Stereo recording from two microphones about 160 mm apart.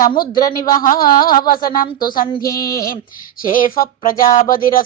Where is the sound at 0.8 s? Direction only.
60° left (ahead or behind).